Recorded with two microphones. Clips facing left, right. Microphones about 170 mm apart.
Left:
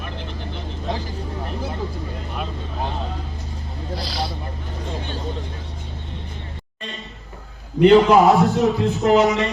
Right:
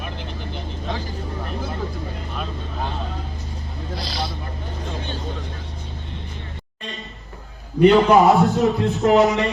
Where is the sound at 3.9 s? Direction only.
10° left (ahead or behind).